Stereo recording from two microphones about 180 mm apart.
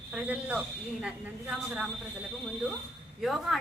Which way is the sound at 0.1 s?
5° right (ahead or behind).